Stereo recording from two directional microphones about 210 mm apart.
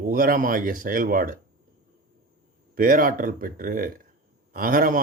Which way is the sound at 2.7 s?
40° right (ahead or behind).